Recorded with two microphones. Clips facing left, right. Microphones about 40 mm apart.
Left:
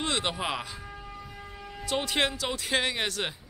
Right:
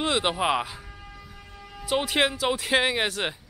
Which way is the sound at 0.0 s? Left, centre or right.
Centre.